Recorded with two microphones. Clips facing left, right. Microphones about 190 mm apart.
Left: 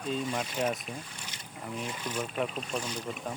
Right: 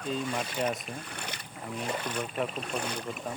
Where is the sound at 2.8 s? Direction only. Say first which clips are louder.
Right 1 dB; 60° right (ahead or behind).